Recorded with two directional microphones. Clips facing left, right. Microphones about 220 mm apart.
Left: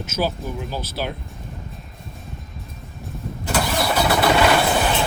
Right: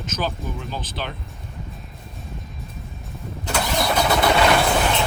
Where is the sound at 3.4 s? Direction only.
5° left (ahead or behind).